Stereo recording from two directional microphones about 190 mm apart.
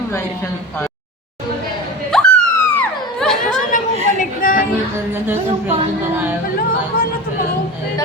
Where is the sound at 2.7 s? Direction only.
5° left (ahead or behind).